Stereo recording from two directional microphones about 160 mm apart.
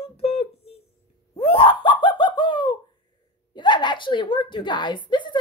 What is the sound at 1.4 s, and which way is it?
Laughter, 35° left (ahead or behind).